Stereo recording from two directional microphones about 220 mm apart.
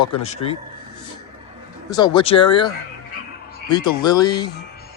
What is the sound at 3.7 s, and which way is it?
Speech, 20° left (ahead or behind).